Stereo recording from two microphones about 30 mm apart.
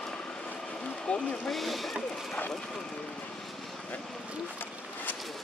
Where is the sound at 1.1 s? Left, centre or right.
Left.